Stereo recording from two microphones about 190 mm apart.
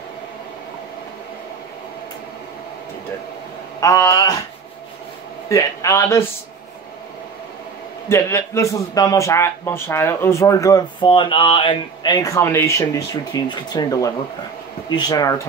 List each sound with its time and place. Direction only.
3.8 s a man's voice: 15° left (ahead or behind)
5.5 s a man's voice: 15° left (ahead or behind)
8.1 s a man's voice: 15° left (ahead or behind)